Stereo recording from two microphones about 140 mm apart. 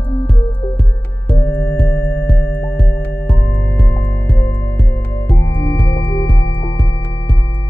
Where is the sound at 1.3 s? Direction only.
15° left (ahead or behind).